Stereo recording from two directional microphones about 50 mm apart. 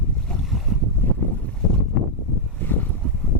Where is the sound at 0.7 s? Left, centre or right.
Centre.